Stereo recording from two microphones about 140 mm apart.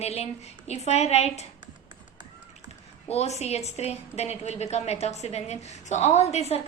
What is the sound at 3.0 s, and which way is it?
A woman's voice, 50° left (ahead or behind).